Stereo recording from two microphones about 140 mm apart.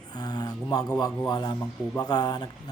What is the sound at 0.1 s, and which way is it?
Speech, 30° left (ahead or behind).